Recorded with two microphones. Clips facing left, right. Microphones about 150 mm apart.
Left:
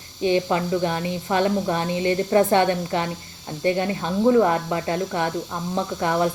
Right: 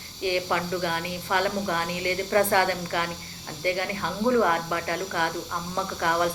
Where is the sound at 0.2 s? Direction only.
25° left (ahead or behind).